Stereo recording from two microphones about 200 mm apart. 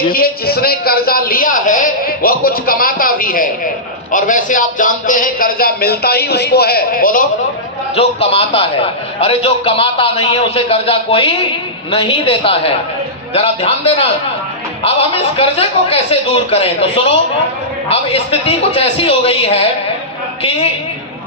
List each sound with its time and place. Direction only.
0.1 s a man's voice: 50° left (ahead or behind)
7.9 s a man's voice: 30° left (ahead or behind)